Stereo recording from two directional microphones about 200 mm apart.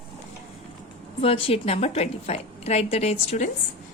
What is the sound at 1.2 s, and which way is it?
Speech, 30° left (ahead or behind).